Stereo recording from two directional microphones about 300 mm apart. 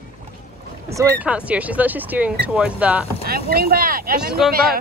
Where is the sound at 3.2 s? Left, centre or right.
Right.